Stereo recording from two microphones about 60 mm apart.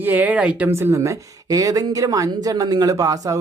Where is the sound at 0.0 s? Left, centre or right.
Right.